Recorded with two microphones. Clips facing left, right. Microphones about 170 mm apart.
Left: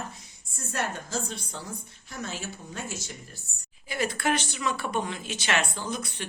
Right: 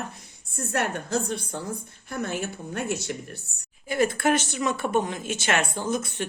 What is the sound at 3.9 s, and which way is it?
Speech, 50° right (ahead or behind).